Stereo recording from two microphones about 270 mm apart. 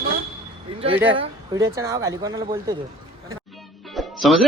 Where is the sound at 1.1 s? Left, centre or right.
Centre.